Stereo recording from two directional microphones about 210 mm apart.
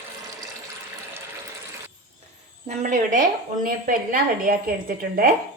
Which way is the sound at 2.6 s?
35° right (ahead or behind).